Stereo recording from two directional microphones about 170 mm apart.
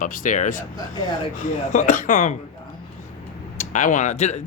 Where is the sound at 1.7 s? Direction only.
50° left (ahead or behind).